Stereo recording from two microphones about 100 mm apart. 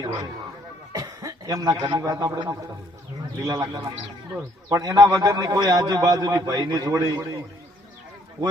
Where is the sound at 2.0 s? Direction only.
35° right (ahead or behind).